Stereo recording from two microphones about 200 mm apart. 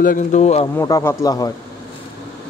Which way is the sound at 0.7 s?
15° left (ahead or behind).